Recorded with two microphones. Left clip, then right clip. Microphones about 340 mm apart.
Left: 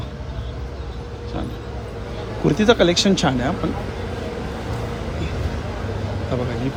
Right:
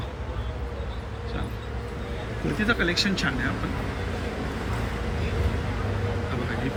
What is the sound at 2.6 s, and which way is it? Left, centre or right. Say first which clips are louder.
Speech: left 8 dB; centre.